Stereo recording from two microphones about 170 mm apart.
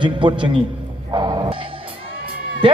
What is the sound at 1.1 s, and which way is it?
Music, 25° right (ahead or behind).